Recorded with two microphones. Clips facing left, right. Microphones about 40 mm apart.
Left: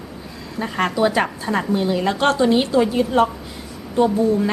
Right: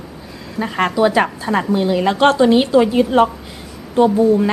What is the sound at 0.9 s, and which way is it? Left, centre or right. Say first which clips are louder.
Speech: right 4 dB; centre.